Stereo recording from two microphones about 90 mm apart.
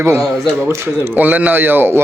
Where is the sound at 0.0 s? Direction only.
30° right (ahead or behind).